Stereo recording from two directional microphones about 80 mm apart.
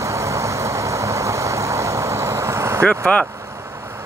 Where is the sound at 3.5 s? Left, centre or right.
Right.